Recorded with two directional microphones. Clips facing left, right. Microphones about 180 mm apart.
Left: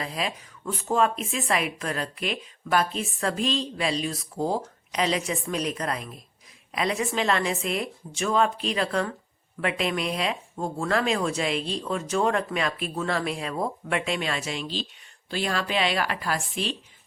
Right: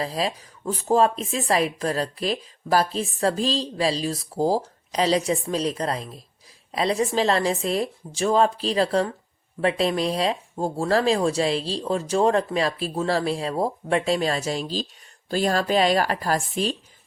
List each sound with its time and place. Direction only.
0.0 s speech: 35° right (ahead or behind)